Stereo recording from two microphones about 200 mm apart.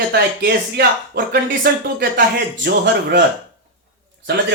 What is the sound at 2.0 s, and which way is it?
Speech, 60° right (ahead or behind).